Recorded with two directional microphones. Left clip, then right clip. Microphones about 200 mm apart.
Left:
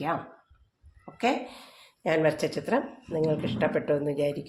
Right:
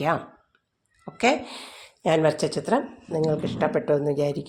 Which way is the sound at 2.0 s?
35° right (ahead or behind).